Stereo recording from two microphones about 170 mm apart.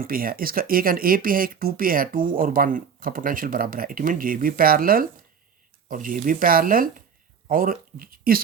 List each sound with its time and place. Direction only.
0.0 s speech: 55° right (ahead or behind)